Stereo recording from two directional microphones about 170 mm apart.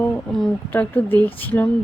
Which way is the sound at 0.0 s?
5° left (ahead or behind).